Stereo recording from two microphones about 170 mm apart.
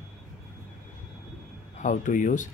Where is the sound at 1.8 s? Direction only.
50° left (ahead or behind).